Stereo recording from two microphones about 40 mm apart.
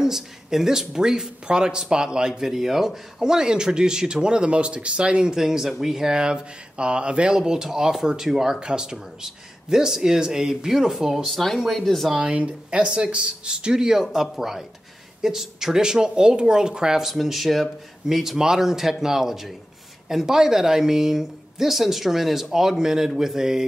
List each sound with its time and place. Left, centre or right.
0.0 s speech: centre
5.4 s speech: centre
11.3 s speech: centre
12.2 s speech: right
17.0 s speech: centre